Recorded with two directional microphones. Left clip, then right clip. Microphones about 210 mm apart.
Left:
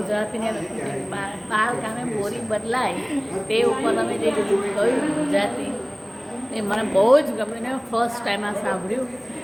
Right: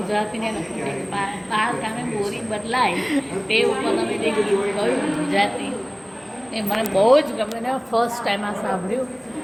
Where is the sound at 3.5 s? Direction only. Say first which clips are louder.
Right 2 dB; 10° left (ahead or behind).